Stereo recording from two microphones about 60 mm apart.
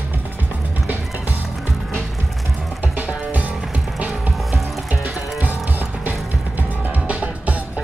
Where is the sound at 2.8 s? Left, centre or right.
Right.